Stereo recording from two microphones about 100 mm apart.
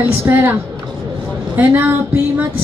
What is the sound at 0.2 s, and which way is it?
Speech, 20° right (ahead or behind).